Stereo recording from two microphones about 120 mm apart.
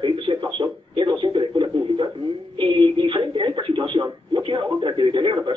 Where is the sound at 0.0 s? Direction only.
45° right (ahead or behind).